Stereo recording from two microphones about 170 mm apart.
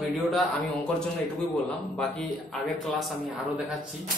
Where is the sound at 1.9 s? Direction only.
5° left (ahead or behind).